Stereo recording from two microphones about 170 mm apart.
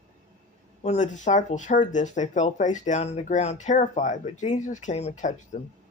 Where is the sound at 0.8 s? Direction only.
45° left (ahead or behind).